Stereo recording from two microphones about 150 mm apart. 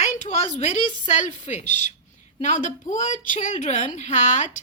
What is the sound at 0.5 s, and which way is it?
Speech, 50° left (ahead or behind).